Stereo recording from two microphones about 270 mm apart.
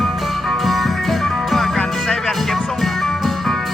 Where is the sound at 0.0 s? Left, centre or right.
Centre.